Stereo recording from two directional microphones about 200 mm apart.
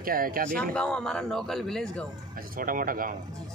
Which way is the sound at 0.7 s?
5° left (ahead or behind).